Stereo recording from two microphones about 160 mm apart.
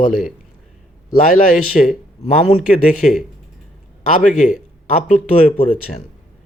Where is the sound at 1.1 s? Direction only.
60° left (ahead or behind).